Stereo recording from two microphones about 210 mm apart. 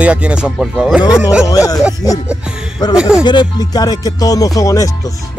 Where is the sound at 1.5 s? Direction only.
15° left (ahead or behind).